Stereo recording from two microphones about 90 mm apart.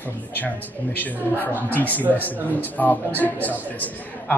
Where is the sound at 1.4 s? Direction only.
20° left (ahead or behind).